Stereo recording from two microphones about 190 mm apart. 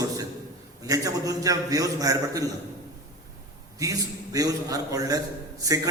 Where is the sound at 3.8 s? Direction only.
20° right (ahead or behind).